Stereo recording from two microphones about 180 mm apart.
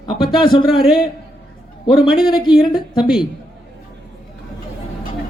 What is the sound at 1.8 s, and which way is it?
Speech, 25° left (ahead or behind).